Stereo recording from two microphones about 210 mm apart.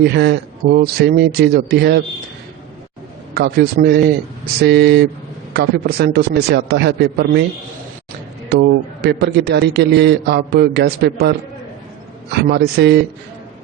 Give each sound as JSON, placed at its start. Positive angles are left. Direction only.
{"t": 0.0, "sound": "a man's voice", "side_deg": -50}
{"t": 3.3, "sound": "a man's voice", "side_deg": -50}
{"t": 8.4, "sound": "a man's voice", "side_deg": -50}